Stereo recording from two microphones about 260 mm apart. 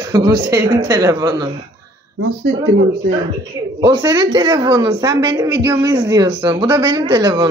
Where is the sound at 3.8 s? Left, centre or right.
Centre.